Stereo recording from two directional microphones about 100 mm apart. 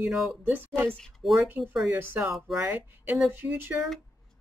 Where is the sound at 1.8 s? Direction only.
20° right (ahead or behind).